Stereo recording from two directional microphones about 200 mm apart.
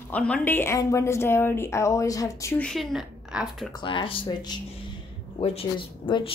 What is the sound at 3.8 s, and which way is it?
Speech, 25° left (ahead or behind).